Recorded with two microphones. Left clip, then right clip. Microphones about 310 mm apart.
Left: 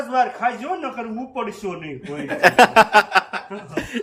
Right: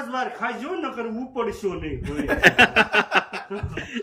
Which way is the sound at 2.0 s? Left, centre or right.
Centre.